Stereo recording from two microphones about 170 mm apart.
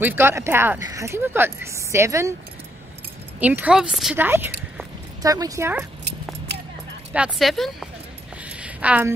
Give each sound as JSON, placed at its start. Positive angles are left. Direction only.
{"t": 0.0, "sound": "speech", "side_deg": -15}
{"t": 3.3, "sound": "speech", "side_deg": -10}
{"t": 7.2, "sound": "speech", "side_deg": 0}
{"t": 8.5, "sound": "a sound", "side_deg": -10}